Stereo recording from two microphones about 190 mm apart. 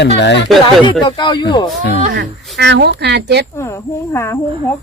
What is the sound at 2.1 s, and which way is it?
Speech, 65° right (ahead or behind).